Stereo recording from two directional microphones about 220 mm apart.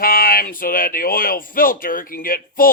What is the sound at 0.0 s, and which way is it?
Speech, 40° left (ahead or behind).